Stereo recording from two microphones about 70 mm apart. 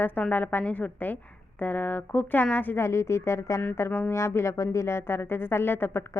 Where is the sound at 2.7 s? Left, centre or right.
Left.